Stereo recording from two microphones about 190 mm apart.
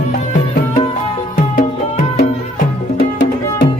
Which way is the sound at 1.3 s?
50° left (ahead or behind).